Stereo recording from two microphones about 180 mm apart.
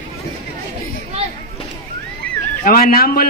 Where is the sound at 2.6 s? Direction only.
55° left (ahead or behind).